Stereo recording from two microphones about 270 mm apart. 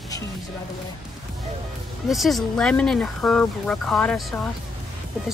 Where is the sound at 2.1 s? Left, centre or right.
Centre.